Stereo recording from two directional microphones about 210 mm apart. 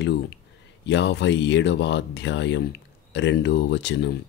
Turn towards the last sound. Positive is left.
turn(degrees=55)  # may be behind; listen again after turning